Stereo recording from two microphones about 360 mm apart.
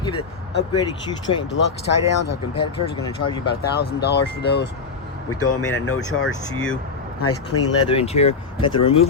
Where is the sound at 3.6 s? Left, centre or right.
Left.